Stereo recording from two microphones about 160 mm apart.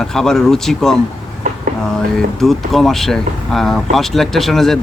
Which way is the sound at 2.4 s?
Centre (ahead or behind).